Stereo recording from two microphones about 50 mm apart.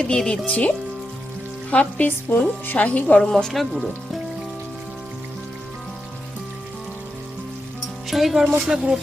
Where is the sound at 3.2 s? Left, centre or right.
Centre.